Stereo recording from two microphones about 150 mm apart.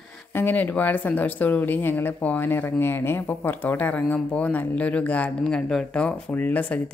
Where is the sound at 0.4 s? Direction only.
10° left (ahead or behind).